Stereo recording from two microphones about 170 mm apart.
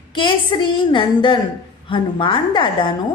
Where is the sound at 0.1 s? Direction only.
30° left (ahead or behind).